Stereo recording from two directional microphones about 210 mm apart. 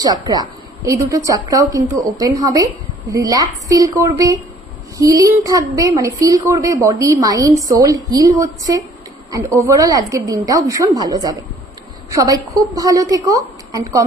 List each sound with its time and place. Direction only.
0.0 s a woman's voice: 20° right (ahead or behind)